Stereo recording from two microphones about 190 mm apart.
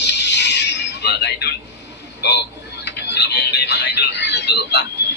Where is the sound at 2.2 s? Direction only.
65° left (ahead or behind).